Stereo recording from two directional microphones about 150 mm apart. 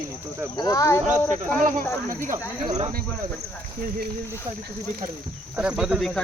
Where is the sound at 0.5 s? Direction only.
25° left (ahead or behind).